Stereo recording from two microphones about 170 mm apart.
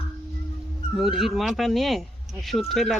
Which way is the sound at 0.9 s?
Centre (ahead or behind).